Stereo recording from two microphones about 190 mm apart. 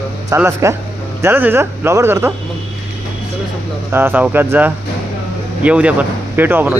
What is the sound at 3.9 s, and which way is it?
Speech, 10° right (ahead or behind).